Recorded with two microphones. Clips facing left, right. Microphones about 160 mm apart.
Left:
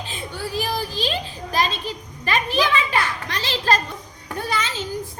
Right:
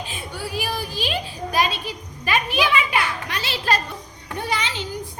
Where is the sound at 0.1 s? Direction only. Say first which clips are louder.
Left 1 dB; 10° right (ahead or behind).